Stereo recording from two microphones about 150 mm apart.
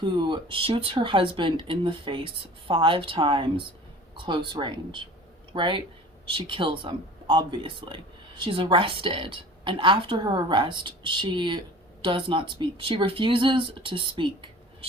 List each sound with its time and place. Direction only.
0.0 s speech: 30° right (ahead or behind)